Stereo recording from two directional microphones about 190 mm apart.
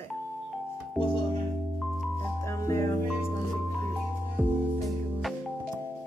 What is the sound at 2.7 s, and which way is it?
Speech, 15° left (ahead or behind).